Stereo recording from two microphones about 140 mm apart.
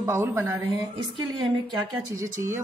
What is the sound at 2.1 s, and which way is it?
Speech, 20° right (ahead or behind).